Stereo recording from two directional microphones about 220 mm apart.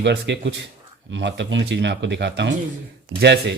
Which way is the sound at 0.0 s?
50° right (ahead or behind).